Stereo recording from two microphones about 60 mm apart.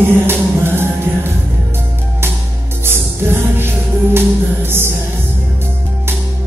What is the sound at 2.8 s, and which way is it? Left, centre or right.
Music, right.